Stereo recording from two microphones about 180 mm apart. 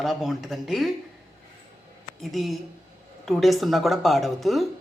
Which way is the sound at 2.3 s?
Centre (ahead or behind).